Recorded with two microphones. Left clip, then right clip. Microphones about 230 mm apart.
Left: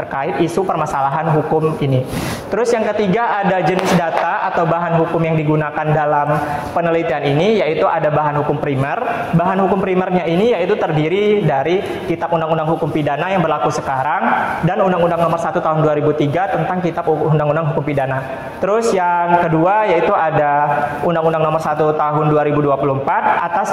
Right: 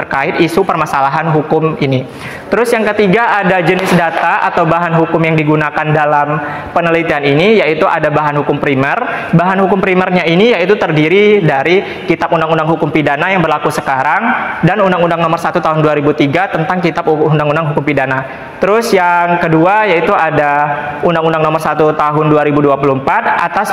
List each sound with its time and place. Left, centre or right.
2.5 s a man's voice: right
14.8 s a man's voice: right
18.7 s a man's voice: right